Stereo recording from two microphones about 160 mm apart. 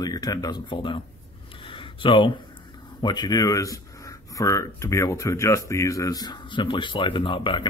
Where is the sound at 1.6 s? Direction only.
30° left (ahead or behind).